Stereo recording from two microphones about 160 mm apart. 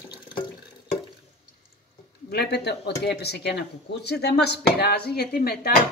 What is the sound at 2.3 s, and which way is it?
Speech, 90° left.